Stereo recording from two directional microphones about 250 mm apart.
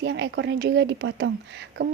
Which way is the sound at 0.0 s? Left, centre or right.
Right.